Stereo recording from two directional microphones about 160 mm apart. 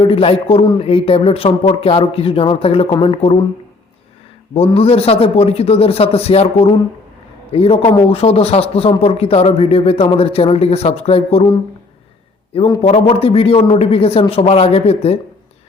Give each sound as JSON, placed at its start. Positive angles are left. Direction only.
{"t": 0.0, "sound": "speech", "side_deg": 35}
{"t": 4.5, "sound": "speech", "side_deg": 35}
{"t": 12.5, "sound": "speech", "side_deg": 30}